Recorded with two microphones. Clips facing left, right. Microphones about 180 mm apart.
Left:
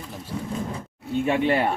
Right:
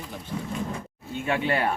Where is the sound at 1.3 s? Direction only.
25° left (ahead or behind).